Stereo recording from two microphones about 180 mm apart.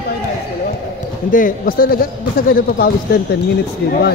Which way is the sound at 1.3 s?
50° left (ahead or behind).